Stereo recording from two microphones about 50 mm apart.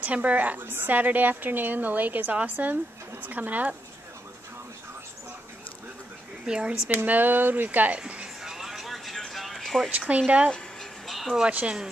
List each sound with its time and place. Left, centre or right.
0.0 s a woman's voice: right
6.4 s speech: centre
7.0 s a woman's voice: right
8.5 s music: centre
9.8 s a woman's voice: right
11.1 s music: centre